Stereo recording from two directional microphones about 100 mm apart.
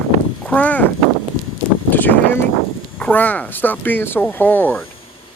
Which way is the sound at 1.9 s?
20° left (ahead or behind).